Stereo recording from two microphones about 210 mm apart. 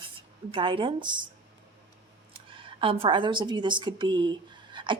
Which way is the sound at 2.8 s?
25° right (ahead or behind).